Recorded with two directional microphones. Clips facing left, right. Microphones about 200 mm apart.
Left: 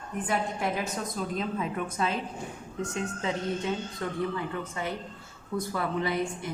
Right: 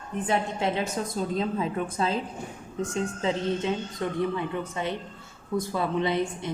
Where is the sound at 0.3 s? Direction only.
25° right (ahead or behind).